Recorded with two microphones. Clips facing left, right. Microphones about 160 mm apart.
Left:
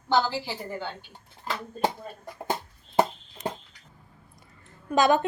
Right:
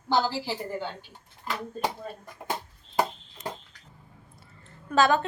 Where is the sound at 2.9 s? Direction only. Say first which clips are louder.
Left 3 dB; 25° left (ahead or behind).